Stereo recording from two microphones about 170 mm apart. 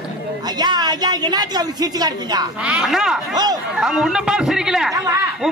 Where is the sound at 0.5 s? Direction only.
25° right (ahead or behind).